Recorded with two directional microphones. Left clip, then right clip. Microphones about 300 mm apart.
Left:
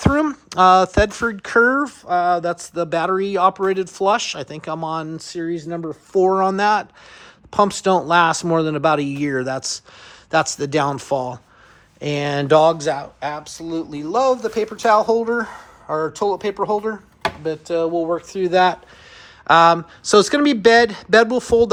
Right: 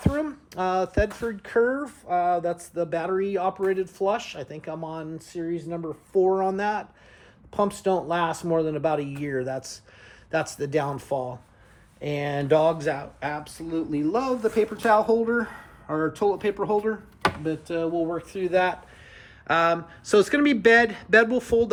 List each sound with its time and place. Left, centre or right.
0.0 s speech: left